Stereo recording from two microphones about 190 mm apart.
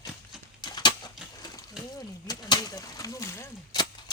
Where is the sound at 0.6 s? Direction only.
20° left (ahead or behind).